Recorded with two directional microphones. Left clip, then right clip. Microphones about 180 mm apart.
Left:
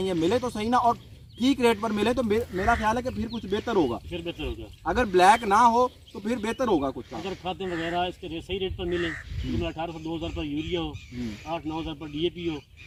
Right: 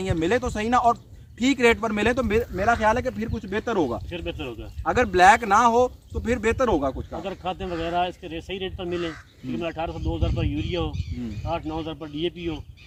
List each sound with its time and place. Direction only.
0.0 s speech: 15° right (ahead or behind)
4.1 s speech: centre (ahead or behind)
4.8 s speech: 20° right (ahead or behind)
7.2 s speech: centre (ahead or behind)